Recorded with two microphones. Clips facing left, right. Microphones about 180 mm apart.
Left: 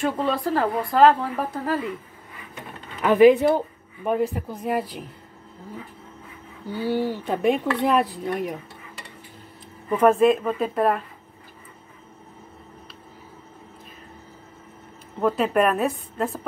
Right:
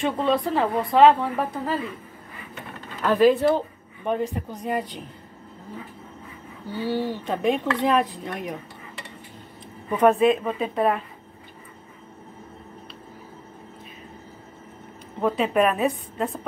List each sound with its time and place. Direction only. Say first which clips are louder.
0.0 s speech: right 1 dB; centre (ahead or behind)
3.0 s speech: left 3 dB; 15° left (ahead or behind)
4.0 s speech: left 2 dB; 5° left (ahead or behind)
6.7 s speech: left 2 dB; 10° left (ahead or behind)
9.8 s speech: left 1 dB; centre (ahead or behind)
15.1 s speech: left 1 dB; centre (ahead or behind)